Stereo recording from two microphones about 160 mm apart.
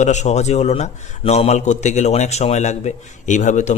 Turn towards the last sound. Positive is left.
turn(degrees=50)  # may be behind; listen again after turning